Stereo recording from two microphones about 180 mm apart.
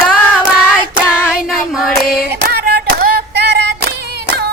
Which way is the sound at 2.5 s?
60° right (ahead or behind).